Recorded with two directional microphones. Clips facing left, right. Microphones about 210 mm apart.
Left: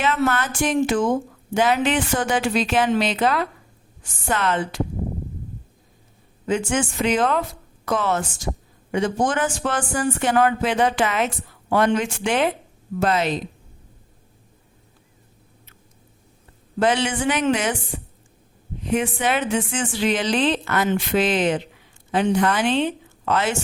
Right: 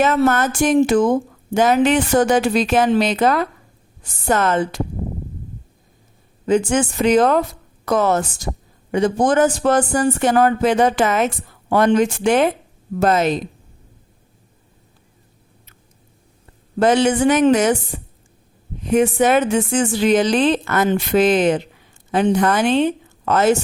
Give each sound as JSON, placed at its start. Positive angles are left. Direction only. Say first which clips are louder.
{"t": 0.0, "sound": "a man's voice", "louder": "right 6 dB", "side_deg": -45}
{"t": 6.4, "sound": "a man's voice", "louder": "right 5 dB", "side_deg": -40}
{"t": 16.8, "sound": "speech", "louder": "right 6 dB", "side_deg": -45}
{"t": 18.9, "sound": "speech", "louder": "right 7 dB", "side_deg": -45}